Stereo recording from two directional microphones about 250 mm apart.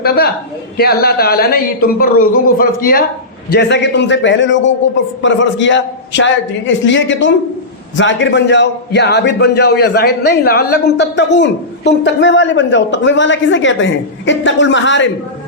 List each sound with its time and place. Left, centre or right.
0.0 s a man's voice: left